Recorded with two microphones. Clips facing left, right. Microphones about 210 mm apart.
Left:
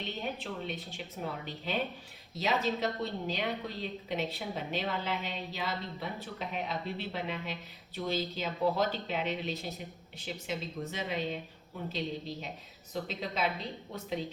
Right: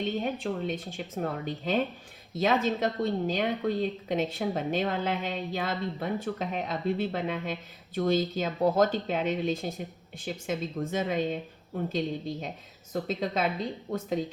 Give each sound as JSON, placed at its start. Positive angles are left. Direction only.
{"t": 0.2, "sound": "a woman's voice", "side_deg": -50}